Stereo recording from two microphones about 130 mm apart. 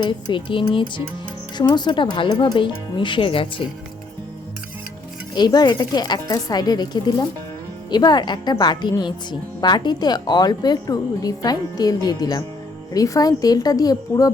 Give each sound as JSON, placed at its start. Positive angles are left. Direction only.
{"t": 0.0, "sound": "a woman's voice", "side_deg": 40}
{"t": 5.3, "sound": "a woman's voice", "side_deg": 30}